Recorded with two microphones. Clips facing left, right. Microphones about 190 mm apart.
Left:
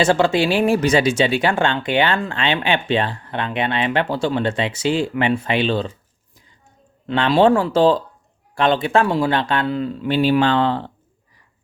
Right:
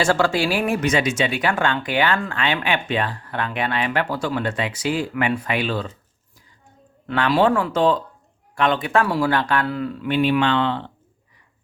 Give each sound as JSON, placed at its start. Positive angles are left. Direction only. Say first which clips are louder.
{"t": 0.0, "sound": "speech", "louder": "left 3 dB", "side_deg": 20}
{"t": 7.1, "sound": "speech", "louder": "left 3 dB", "side_deg": 25}